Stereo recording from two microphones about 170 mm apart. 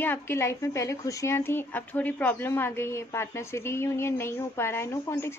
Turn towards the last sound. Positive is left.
turn(degrees=15)  # may be behind; listen again after turning